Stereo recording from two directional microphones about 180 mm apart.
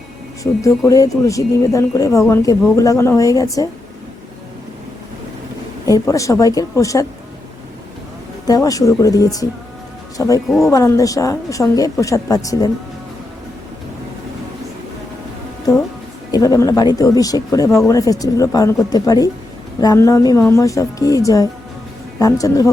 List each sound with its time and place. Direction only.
0.6 s speech: 20° left (ahead or behind)
5.8 s speech: 20° left (ahead or behind)
8.4 s a woman's voice: 20° left (ahead or behind)
15.7 s music: 20° left (ahead or behind)
16.3 s a woman's voice: 20° left (ahead or behind)